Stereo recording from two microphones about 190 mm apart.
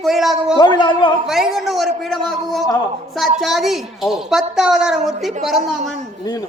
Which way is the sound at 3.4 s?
Centre (ahead or behind).